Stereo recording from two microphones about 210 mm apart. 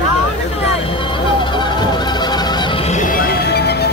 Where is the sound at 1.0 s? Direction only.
25° left (ahead or behind).